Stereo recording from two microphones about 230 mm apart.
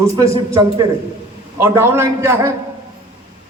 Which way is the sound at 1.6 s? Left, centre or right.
Centre.